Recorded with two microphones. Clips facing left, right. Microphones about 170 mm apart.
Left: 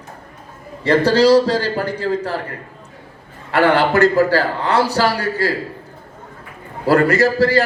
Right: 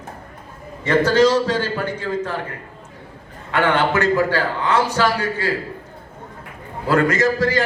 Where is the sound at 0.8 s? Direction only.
35° left (ahead or behind).